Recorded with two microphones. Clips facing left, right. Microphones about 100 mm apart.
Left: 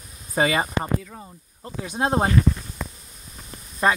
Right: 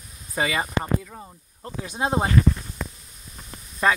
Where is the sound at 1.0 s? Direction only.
5° right (ahead or behind).